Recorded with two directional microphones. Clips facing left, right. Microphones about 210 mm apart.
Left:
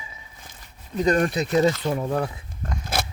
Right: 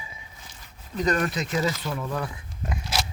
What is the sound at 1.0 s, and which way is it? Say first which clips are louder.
Speech: left 4 dB; 35° left (ahead or behind).